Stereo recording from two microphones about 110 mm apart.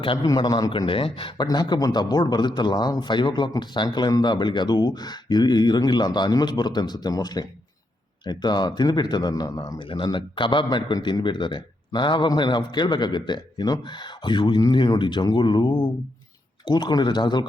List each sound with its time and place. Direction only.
0.0 s speech: 50° left (ahead or behind)
0.3 s speech: 40° left (ahead or behind)
0.7 s speech: 50° left (ahead or behind)
1.5 s speech: 35° left (ahead or behind)